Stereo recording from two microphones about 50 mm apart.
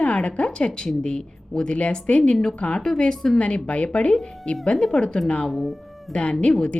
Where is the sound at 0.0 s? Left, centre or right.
Left.